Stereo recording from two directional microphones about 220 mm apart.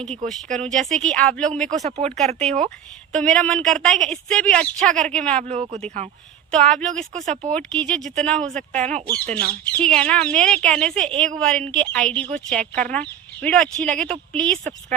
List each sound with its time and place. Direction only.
0.5 s speech: 5° left (ahead or behind)
1.7 s speech: 30° right (ahead or behind)
3.1 s speech: 5° left (ahead or behind)
5.4 s speech: 30° right (ahead or behind)
6.5 s speech: 5° left (ahead or behind)
8.9 s speech: 30° right (ahead or behind)
9.2 s speech: 5° left (ahead or behind)